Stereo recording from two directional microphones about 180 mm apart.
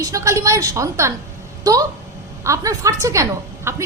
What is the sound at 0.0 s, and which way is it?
A woman's voice, 15° right (ahead or behind).